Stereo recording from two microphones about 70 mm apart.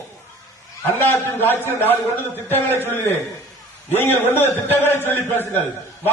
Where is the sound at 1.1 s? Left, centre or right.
Left.